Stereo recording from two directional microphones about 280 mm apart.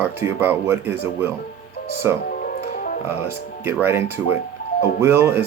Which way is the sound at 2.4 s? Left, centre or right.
Left.